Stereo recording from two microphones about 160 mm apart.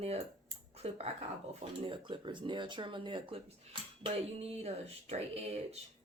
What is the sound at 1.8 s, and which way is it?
Speech, 30° right (ahead or behind).